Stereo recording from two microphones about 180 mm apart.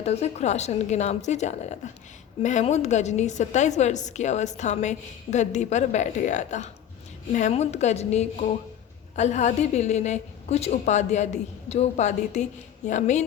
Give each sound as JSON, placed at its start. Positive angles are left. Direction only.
{"t": 0.0, "sound": "a woman's voice", "side_deg": 35}